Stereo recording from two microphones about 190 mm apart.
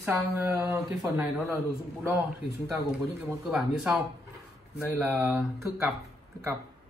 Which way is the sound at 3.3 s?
5° right (ahead or behind).